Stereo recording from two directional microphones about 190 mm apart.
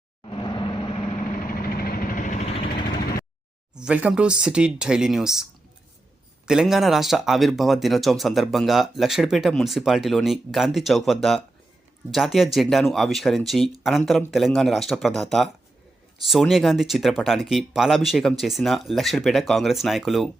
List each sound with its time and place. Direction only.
0.3 s vehicle: 25° left (ahead or behind)
1.5 s vehicle: 50° left (ahead or behind); by 2.8 s 30° left (ahead or behind)
3.8 s speech: 5° right (ahead or behind)